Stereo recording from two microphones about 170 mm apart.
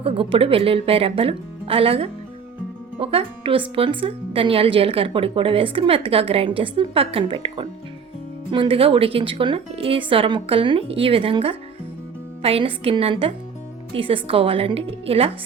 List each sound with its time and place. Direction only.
0.0 s a woman's voice: 35° right (ahead or behind)